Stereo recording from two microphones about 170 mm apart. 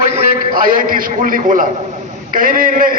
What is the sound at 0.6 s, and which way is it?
A man's voice, 55° right (ahead or behind).